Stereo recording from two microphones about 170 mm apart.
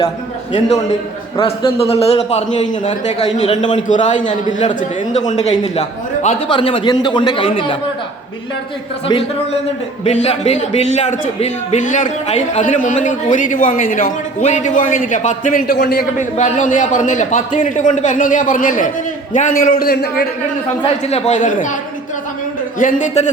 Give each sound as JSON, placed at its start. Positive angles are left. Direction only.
{"t": 1.4, "sound": "a man's voice", "side_deg": 35}
{"t": 9.0, "sound": "a man's voice", "side_deg": 30}
{"t": 15.6, "sound": "a man's voice", "side_deg": 70}
{"t": 16.1, "sound": "a man's voice", "side_deg": 45}
{"t": 21.1, "sound": "a man's voice", "side_deg": 40}
{"t": 22.8, "sound": "a man's voice", "side_deg": 45}